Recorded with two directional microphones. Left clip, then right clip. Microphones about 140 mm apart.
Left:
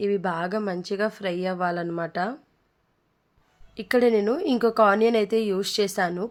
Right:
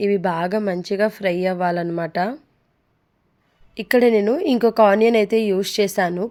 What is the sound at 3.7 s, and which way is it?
A woman's voice, 25° right (ahead or behind).